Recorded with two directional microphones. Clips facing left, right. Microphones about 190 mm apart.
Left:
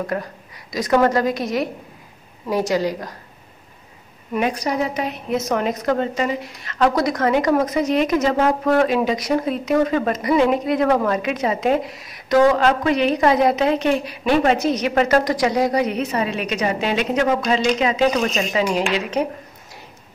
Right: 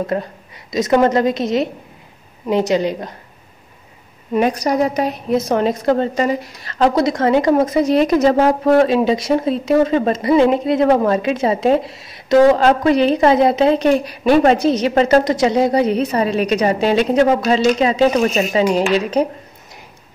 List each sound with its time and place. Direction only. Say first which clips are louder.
0.0 s a woman's voice: right 4 dB; 25° right (ahead or behind)
4.3 s a woman's voice: right 5 dB; 40° right (ahead or behind)